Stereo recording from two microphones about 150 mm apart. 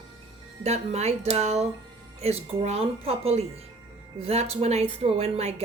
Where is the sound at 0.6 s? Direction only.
45° right (ahead or behind).